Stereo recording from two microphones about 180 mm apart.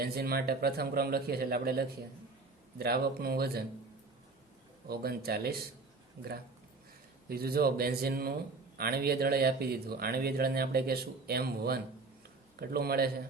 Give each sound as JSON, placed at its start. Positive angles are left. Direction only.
{"t": 0.0, "sound": "speech", "side_deg": -60}
{"t": 4.9, "sound": "speech", "side_deg": -60}
{"t": 7.3, "sound": "speech", "side_deg": -60}